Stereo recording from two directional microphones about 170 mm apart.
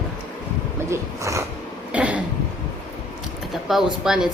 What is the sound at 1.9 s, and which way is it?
Cough, 10° right (ahead or behind).